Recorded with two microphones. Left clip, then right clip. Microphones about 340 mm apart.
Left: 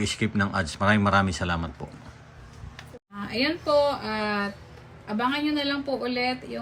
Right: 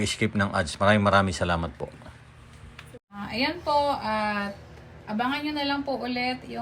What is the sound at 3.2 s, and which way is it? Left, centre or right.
A woman's voice, centre.